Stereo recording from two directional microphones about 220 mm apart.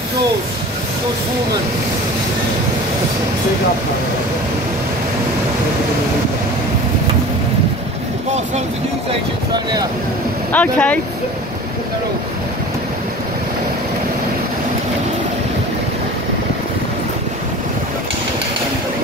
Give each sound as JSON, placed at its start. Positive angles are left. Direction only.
{"t": 9.5, "sound": "speech", "side_deg": -20}
{"t": 10.5, "sound": "speech", "side_deg": 5}